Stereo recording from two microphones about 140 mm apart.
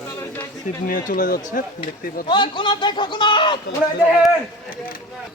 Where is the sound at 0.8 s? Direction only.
75° left (ahead or behind).